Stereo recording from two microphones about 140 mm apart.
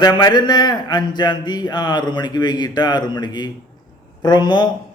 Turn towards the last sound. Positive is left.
turn(degrees=30)  # may be behind; listen again after turning